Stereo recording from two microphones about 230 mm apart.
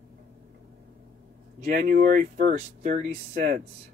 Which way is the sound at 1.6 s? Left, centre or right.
Right.